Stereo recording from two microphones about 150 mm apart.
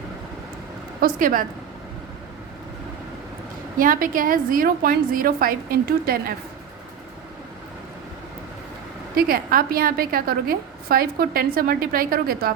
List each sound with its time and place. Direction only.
1.0 s a woman's voice: 65° right (ahead or behind)
3.8 s a woman's voice: 65° right (ahead or behind)
9.1 s a woman's voice: 75° right (ahead or behind)